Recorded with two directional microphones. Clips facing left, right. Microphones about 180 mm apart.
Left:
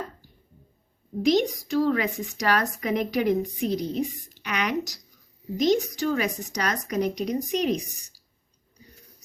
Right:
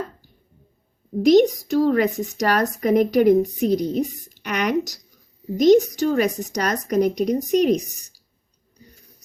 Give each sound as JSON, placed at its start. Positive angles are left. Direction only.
{"t": 1.2, "sound": "a woman's voice", "side_deg": -45}